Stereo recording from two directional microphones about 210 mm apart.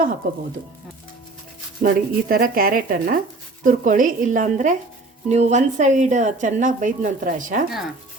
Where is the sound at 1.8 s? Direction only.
45° right (ahead or behind).